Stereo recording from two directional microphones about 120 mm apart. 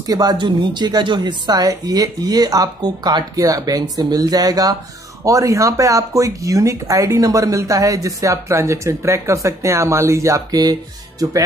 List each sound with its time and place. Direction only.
0.0 s a woman's voice: 30° right (ahead or behind)